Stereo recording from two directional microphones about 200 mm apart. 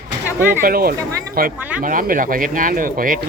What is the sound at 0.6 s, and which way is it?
Speech, 50° right (ahead or behind).